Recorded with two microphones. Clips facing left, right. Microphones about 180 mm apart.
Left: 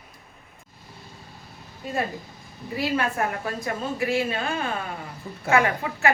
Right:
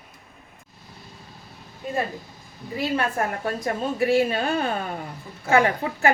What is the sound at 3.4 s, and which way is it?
A woman's voice, 35° right (ahead or behind).